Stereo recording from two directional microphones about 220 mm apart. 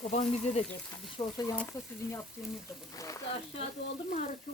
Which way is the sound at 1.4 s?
15° left (ahead or behind).